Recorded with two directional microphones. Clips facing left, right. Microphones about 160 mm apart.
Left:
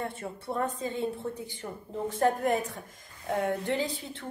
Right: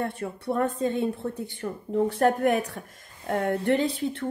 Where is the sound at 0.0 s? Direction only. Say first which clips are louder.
Right 5 dB; 65° right (ahead or behind).